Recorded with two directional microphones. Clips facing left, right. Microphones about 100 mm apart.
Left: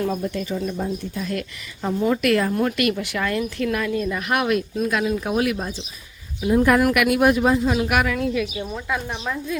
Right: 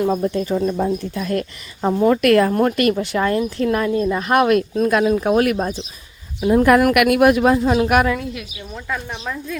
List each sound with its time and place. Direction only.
0.1 s speech: 35° right (ahead or behind)
0.4 s a woman's voice: 50° right (ahead or behind)
1.3 s a woman's voice: 40° right (ahead or behind)
8.7 s speech: 10° left (ahead or behind)